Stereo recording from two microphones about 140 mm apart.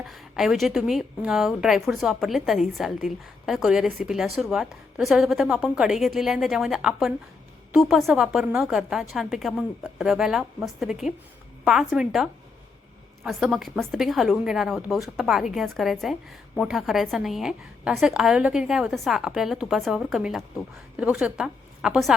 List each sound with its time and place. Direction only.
0.1 s a woman's voice: centre (ahead or behind)